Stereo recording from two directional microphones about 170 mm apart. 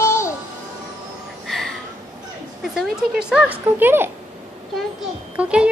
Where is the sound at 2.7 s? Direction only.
5° right (ahead or behind).